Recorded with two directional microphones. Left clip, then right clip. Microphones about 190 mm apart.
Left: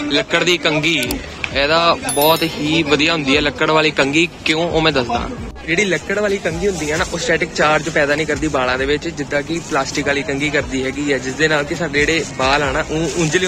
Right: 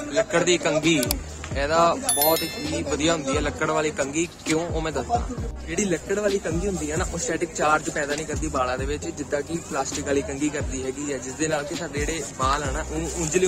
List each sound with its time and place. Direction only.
0.1 s wind chime: centre (ahead or behind)
6.9 s speech: 10° right (ahead or behind)
11.9 s wind chime: 5° right (ahead or behind)